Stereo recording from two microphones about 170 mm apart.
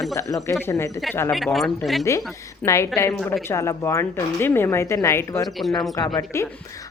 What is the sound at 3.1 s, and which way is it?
Speech, 5° left (ahead or behind).